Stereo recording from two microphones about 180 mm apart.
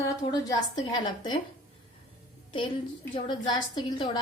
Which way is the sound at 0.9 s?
25° left (ahead or behind).